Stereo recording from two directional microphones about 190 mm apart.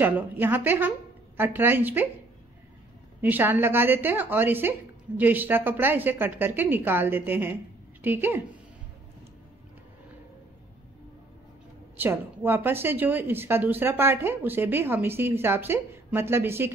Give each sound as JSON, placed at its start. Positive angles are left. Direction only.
{"t": 0.0, "sound": "a woman's voice", "side_deg": -10}
{"t": 3.2, "sound": "a woman's voice", "side_deg": -10}
{"t": 12.0, "sound": "a woman's voice", "side_deg": -10}